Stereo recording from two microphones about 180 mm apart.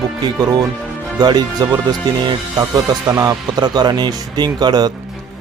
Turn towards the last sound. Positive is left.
turn(degrees=-25)  # may be behind; listen again after turning